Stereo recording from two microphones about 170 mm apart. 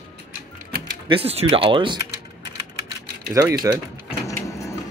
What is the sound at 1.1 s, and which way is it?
Speech, 35° right (ahead or behind).